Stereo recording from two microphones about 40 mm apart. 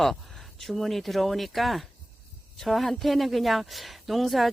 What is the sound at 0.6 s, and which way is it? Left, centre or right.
A woman's voice, centre.